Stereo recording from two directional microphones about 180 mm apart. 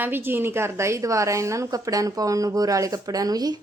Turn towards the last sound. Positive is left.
turn(degrees=-20)  # may be behind; listen again after turning